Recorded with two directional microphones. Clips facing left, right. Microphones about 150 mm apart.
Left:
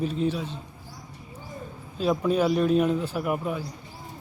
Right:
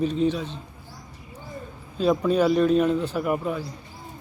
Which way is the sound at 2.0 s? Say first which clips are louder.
Right 3 dB; 5° left (ahead or behind).